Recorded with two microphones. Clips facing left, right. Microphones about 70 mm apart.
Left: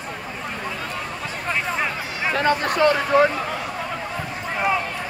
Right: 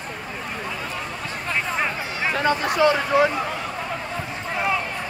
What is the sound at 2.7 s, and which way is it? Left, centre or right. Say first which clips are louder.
Speech: right 1 dB; left.